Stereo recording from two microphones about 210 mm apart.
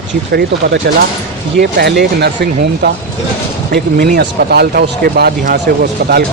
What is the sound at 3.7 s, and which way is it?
Speech, 45° right (ahead or behind).